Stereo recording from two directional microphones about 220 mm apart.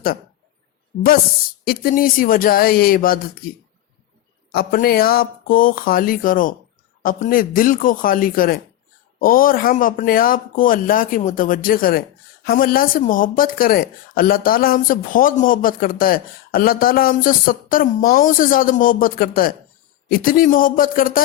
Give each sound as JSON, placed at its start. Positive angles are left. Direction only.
{"t": 1.6, "sound": "speech", "side_deg": 40}
{"t": 4.5, "sound": "speech", "side_deg": 45}